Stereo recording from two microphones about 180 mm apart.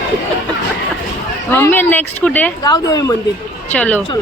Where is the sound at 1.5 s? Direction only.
10° left (ahead or behind).